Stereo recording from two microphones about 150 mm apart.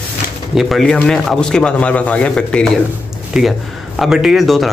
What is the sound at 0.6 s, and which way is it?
Speech, centre (ahead or behind).